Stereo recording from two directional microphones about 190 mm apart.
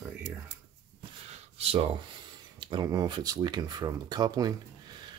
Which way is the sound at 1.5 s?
30° right (ahead or behind).